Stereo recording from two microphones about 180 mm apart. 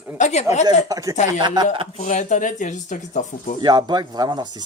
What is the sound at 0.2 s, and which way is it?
Speech, 40° left (ahead or behind).